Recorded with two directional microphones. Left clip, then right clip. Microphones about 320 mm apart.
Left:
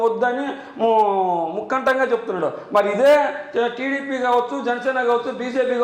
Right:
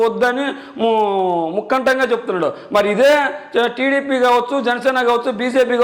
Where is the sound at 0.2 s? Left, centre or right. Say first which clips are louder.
Right 4 dB; right.